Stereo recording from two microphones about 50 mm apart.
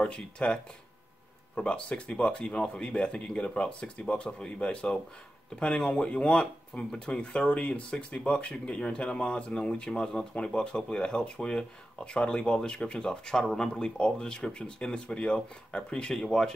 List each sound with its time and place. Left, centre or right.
0.0 s speech: centre
13.4 s speech: centre
13.7 s speech: centre